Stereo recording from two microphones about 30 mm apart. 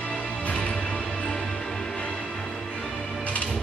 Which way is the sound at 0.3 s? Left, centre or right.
Left.